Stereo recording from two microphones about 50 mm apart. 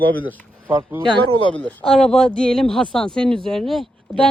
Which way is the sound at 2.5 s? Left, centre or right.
Centre.